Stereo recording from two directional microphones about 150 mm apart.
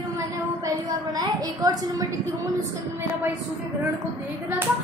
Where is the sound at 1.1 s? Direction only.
25° right (ahead or behind).